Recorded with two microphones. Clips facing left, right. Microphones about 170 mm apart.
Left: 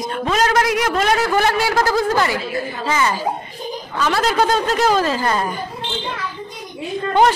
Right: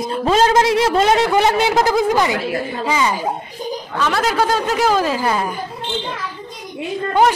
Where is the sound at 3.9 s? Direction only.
Centre (ahead or behind).